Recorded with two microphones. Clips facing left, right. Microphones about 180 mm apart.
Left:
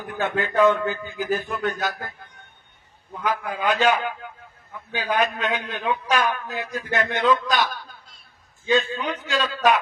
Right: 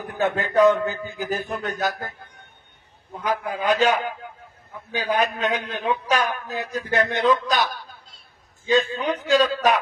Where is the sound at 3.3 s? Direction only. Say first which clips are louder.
Right 2 dB; 40° right (ahead or behind).